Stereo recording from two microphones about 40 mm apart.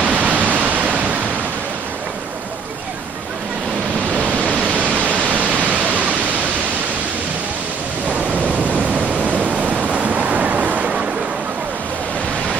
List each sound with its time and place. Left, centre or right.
0.0 s pink noise: right
4.1 s pink noise: right
8.1 s waves: right